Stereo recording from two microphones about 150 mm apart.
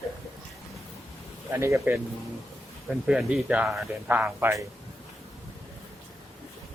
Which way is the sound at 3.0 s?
Centre (ahead or behind).